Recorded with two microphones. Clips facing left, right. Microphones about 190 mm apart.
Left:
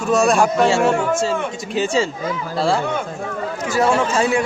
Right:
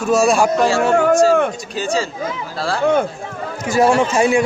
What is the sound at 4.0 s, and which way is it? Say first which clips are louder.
Speech: right 3 dB; 15° right (ahead or behind).